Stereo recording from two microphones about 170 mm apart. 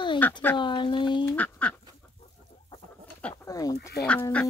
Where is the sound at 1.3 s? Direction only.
10° left (ahead or behind).